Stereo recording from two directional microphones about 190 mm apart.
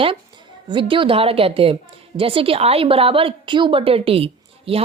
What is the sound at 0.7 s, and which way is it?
A woman's voice, 25° right (ahead or behind).